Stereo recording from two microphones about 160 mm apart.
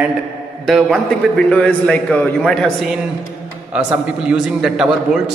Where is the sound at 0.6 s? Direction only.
Centre (ahead or behind).